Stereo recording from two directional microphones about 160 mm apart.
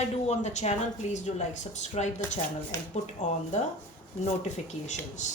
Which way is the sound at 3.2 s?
45° left (ahead or behind).